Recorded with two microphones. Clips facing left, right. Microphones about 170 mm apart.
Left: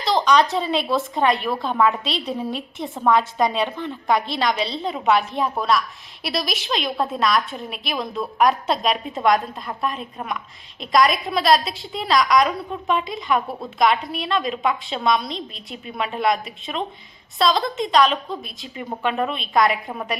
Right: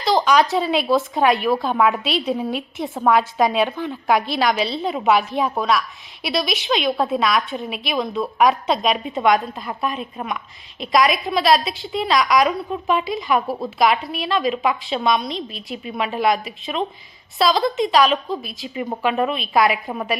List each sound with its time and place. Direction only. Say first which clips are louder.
0.0 s a woman's voice: right 1 dB; centre (ahead or behind)
18.7 s speech: right 4 dB; 15° right (ahead or behind)
19.0 s a woman's voice: right 2 dB; 5° right (ahead or behind)